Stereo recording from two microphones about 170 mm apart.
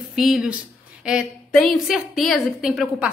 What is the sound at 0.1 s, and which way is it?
A woman's voice, centre (ahead or behind).